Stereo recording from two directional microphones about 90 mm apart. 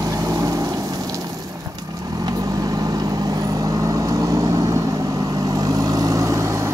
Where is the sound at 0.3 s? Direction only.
40° right (ahead or behind).